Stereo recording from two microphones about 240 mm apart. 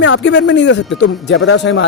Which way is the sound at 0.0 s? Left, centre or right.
Left.